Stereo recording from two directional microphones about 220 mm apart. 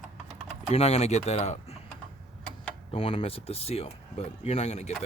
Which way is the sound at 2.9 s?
25° left (ahead or behind).